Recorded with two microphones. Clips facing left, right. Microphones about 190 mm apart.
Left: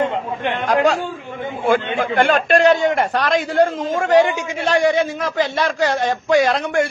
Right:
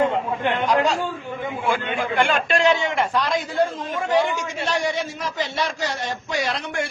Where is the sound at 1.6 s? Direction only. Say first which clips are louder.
Left 7 dB; 45° left (ahead or behind); by 3.6 s 75° left (ahead or behind).